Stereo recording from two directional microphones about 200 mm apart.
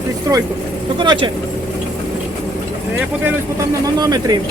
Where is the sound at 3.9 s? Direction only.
20° right (ahead or behind).